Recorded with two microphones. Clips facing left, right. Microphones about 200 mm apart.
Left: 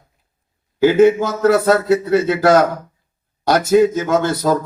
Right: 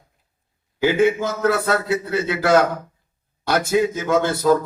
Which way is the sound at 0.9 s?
45° left (ahead or behind).